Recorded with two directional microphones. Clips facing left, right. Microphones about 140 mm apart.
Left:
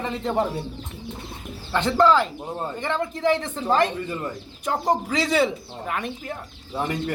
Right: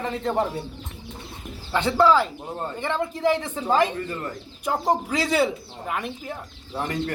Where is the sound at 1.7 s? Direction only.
10° right (ahead or behind).